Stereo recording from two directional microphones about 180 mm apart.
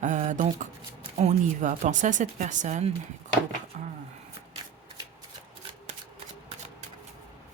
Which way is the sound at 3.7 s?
40° right (ahead or behind).